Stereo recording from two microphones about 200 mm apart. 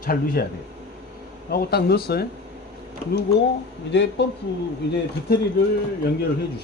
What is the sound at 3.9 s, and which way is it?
Speech, 60° left (ahead or behind).